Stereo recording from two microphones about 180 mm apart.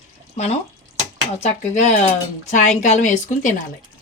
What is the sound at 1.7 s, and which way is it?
Speech, 40° left (ahead or behind).